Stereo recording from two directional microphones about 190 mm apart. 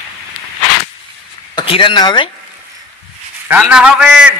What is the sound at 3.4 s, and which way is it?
Speech, 10° right (ahead or behind).